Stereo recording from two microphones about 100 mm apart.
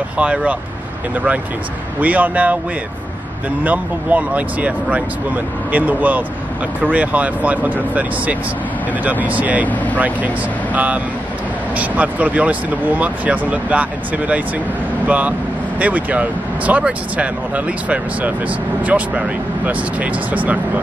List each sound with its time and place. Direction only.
0.2 s speech: 15° right (ahead or behind)
2.0 s speech: 15° right (ahead or behind)
3.6 s speech: 15° right (ahead or behind)